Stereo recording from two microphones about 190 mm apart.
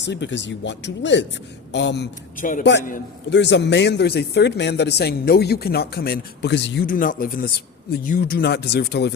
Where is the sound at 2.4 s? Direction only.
45° left (ahead or behind).